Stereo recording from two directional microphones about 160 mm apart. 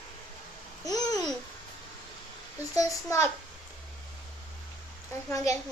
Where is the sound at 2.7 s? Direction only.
20° left (ahead or behind).